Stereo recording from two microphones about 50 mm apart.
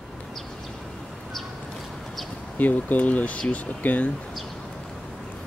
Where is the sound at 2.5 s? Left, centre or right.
Left.